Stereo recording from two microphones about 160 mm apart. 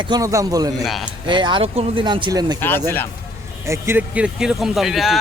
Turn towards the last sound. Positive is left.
turn(degrees=0)  # may be behind; listen again after turning